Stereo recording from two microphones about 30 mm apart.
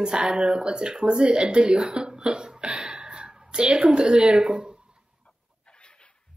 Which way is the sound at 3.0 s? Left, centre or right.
Right.